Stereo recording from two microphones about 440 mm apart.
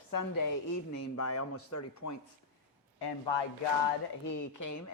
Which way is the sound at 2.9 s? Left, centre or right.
Left.